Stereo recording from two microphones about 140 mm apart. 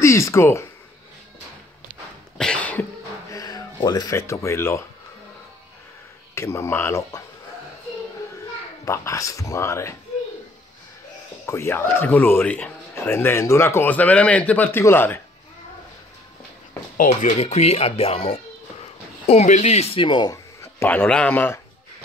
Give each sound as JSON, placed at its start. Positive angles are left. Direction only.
{"t": 0.0, "sound": "speech", "side_deg": 20}
{"t": 2.3, "sound": "cough", "side_deg": 5}
{"t": 3.3, "sound": "speech", "side_deg": 25}
{"t": 6.3, "sound": "speech", "side_deg": 20}
{"t": 8.8, "sound": "speech", "side_deg": 20}
{"t": 11.4, "sound": "speech", "side_deg": 20}
{"t": 16.9, "sound": "speech", "side_deg": 70}